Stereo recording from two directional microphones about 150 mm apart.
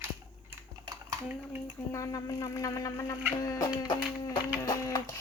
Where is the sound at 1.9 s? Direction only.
20° left (ahead or behind).